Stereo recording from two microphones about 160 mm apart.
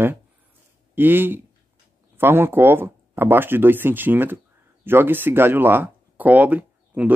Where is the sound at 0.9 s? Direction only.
15° right (ahead or behind).